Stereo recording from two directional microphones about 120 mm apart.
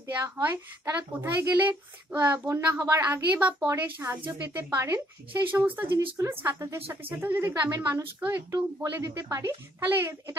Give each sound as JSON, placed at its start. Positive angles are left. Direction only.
{"t": 0.1, "sound": "a woman's voice", "side_deg": -15}
{"t": 2.3, "sound": "a woman's voice", "side_deg": -25}
{"t": 8.5, "sound": "a woman's voice", "side_deg": -30}